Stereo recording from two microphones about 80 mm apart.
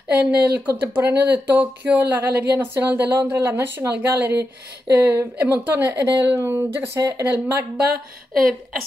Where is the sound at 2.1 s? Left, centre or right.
Right.